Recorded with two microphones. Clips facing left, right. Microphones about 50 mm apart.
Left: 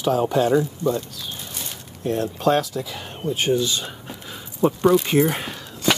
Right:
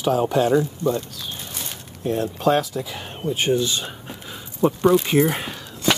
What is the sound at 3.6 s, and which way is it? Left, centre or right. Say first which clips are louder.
Speech: even; right.